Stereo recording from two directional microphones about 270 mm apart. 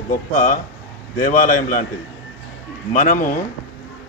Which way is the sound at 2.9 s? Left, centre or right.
Left.